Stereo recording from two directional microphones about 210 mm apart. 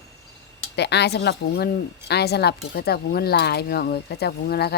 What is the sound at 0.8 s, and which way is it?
Speech, 55° left (ahead or behind).